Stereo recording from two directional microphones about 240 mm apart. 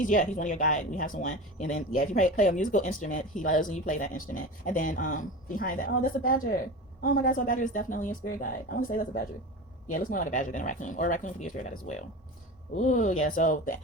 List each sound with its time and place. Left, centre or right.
0.0 s speech: left